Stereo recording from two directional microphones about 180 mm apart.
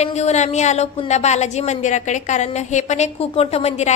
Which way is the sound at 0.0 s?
40° left (ahead or behind).